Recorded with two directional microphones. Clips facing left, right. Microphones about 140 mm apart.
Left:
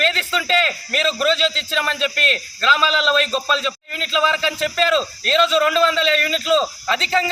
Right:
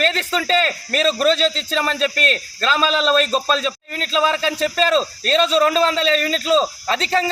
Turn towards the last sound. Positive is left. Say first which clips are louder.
# right 1 dB
turn(degrees=-35)  # may be behind; listen again after turning